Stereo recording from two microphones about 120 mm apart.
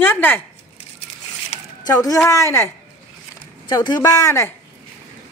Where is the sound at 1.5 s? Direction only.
60° left (ahead or behind).